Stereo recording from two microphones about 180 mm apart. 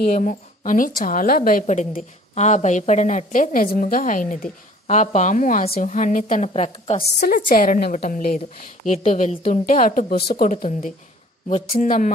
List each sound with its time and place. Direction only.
0.1 s a woman's voice: 45° left (ahead or behind)
7.2 s a woman's voice: 55° left (ahead or behind)
11.4 s speech: 40° left (ahead or behind)